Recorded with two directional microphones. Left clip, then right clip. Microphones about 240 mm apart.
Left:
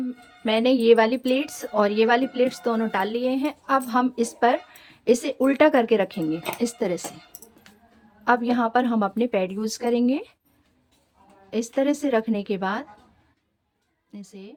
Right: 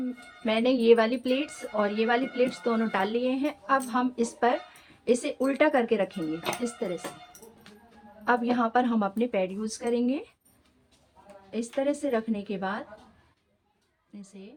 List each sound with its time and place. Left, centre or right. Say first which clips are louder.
0.4 s a woman's voice: left 4 dB; left
8.2 s a woman's voice: left 4 dB; left
11.5 s speech: left 5 dB; left
14.1 s a woman's voice: left 5 dB; left